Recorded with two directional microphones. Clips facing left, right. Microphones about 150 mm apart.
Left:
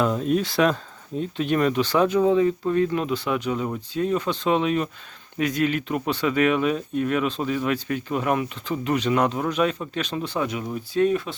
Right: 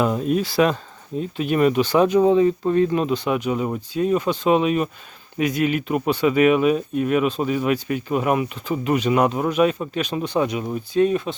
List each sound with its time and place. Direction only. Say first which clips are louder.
0.0 s speech: right 2 dB; 10° right (ahead or behind)